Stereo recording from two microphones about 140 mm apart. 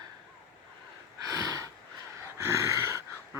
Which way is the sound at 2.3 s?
20° right (ahead or behind).